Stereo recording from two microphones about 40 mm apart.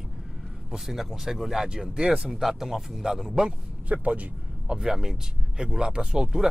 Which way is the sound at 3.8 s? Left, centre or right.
Right.